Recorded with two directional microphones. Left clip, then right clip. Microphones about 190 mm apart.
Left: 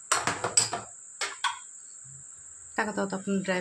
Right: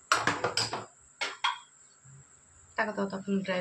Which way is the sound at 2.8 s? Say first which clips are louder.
Left 2 dB; 60° left (ahead or behind).